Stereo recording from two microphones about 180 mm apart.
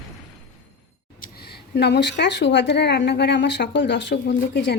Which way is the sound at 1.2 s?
60° left (ahead or behind).